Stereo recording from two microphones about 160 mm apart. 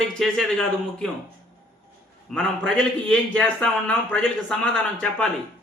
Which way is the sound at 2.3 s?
5° left (ahead or behind).